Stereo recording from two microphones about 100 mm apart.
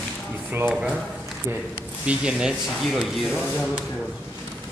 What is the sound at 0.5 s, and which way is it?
Speech, 20° right (ahead or behind).